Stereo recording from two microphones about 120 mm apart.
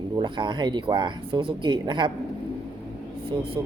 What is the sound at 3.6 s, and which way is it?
Speech, 35° right (ahead or behind).